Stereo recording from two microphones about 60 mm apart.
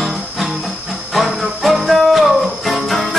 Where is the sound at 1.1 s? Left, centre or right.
Centre.